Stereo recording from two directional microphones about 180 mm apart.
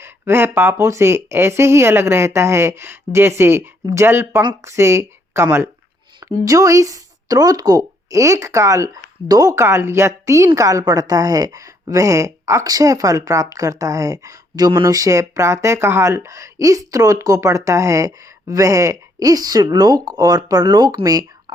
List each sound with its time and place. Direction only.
0.0 s a woman's voice: 15° right (ahead or behind)